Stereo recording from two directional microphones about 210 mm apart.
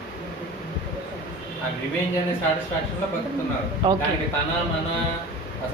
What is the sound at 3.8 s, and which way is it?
Speech, 20° right (ahead or behind).